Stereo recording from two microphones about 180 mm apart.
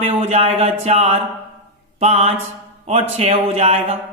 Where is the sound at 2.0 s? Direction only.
35° right (ahead or behind).